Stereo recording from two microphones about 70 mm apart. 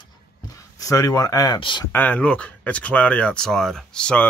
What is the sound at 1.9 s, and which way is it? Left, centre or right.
Speech, left.